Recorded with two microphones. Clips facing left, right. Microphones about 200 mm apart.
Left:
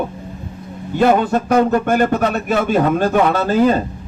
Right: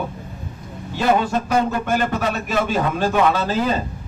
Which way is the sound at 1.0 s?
55° left (ahead or behind).